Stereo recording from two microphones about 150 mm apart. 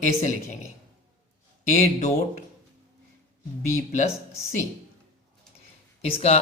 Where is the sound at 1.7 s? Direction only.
50° left (ahead or behind).